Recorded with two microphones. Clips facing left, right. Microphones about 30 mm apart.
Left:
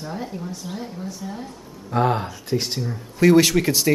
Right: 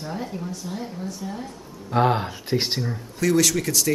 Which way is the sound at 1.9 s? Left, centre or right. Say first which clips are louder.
Even; centre.